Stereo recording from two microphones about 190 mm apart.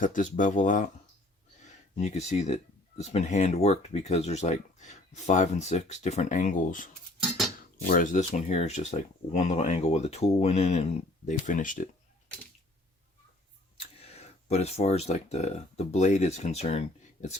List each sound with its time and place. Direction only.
0.0 s speech: 40° left (ahead or behind)
2.0 s speech: 35° left (ahead or behind)
13.7 s speech: 35° left (ahead or behind)